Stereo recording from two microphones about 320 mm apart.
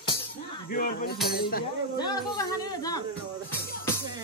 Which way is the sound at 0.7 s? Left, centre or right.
Left.